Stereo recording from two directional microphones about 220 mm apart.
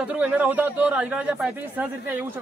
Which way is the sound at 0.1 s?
5° right (ahead or behind).